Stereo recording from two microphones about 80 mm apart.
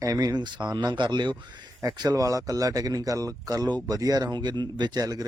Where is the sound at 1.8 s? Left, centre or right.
Right.